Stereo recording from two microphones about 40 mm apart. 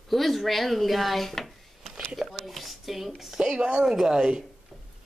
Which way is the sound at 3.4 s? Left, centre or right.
Right.